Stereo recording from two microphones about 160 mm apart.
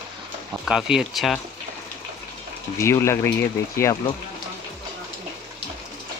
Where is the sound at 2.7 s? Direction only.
15° left (ahead or behind).